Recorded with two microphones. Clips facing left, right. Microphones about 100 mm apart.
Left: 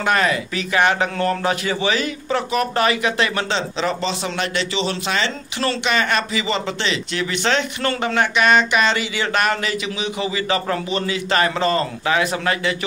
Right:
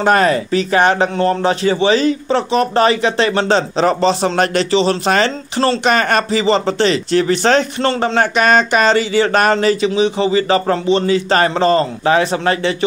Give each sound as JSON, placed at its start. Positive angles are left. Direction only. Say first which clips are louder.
{"t": 0.0, "sound": "speech", "louder": "right 6 dB", "side_deg": -40}